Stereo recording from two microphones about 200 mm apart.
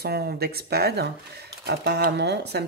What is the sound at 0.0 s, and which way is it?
Speech, 50° right (ahead or behind).